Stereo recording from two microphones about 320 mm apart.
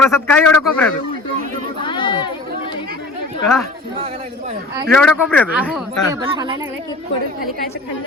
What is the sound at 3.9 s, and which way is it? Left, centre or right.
Speech, centre.